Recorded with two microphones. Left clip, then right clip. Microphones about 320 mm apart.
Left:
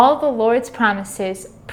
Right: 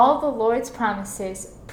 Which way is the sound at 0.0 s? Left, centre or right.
Left.